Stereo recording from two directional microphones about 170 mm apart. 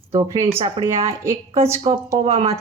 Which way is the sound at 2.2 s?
40° right (ahead or behind).